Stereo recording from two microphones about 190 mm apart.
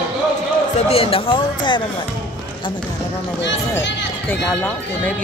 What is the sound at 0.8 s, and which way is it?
Speech, 30° left (ahead or behind).